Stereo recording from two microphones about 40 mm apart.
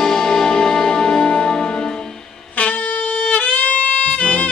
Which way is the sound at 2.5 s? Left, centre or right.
Left.